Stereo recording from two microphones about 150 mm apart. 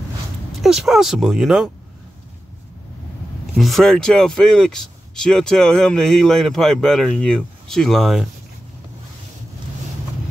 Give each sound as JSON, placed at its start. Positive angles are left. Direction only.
{"t": 0.6, "sound": "speech", "side_deg": 0}
{"t": 3.5, "sound": "speech", "side_deg": 0}